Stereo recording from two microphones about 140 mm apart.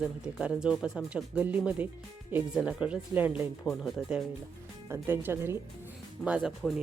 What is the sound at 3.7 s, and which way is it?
Speech, centre (ahead or behind).